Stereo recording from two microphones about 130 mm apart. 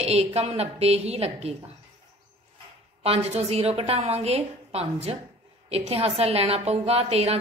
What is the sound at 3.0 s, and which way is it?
A woman's voice, 55° right (ahead or behind).